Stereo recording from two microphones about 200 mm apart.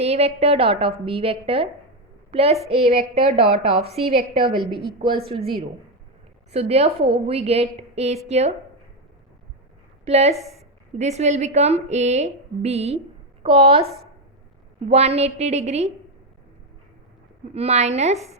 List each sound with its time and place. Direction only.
0.0 s a woman's voice: 30° right (ahead or behind)
6.5 s a woman's voice: 30° right (ahead or behind)
10.1 s a woman's voice: 30° right (ahead or behind)
17.5 s a woman's voice: 30° right (ahead or behind)